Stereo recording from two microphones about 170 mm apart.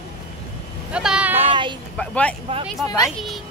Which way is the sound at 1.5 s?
25° right (ahead or behind).